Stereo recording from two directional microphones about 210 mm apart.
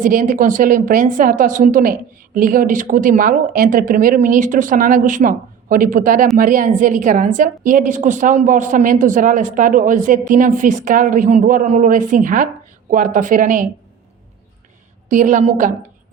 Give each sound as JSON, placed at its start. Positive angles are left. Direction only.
{"t": 0.0, "sound": "a woman's voice", "side_deg": -40}
{"t": 15.1, "sound": "a woman's voice", "side_deg": -40}